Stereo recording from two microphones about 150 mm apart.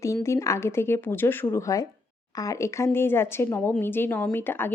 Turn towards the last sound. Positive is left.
turn(degrees=15)  # may be behind; listen again after turning